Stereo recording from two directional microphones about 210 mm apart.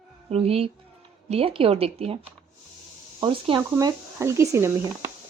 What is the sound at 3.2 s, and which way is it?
Speech, 25° right (ahead or behind).